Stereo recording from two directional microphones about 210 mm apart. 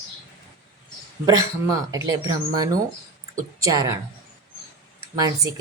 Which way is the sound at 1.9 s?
15° right (ahead or behind).